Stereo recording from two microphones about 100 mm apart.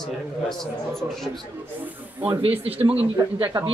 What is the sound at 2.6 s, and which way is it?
Speech, 75° right (ahead or behind).